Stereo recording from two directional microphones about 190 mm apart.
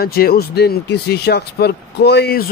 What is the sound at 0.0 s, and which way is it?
Speech, 55° left (ahead or behind).